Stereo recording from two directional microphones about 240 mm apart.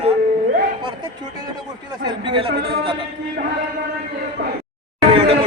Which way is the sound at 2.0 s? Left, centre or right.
Right.